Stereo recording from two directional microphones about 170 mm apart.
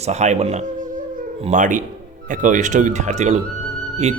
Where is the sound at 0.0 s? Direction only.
40° right (ahead or behind).